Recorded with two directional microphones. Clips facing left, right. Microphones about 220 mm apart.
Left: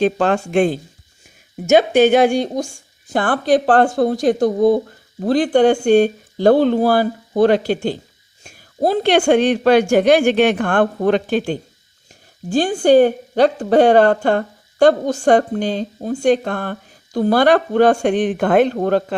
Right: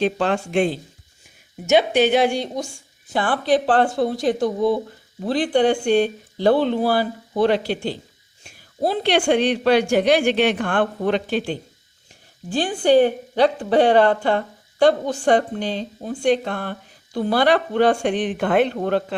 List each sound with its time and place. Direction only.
0.0 s speech: 45° left (ahead or behind)